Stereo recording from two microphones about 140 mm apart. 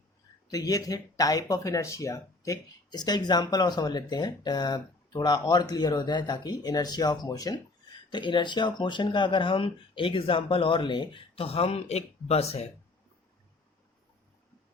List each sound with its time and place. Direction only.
0.4 s speech: 25° left (ahead or behind); by 12.6 s 50° left (ahead or behind)